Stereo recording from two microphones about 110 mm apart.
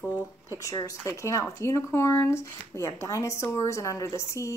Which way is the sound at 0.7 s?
30° left (ahead or behind).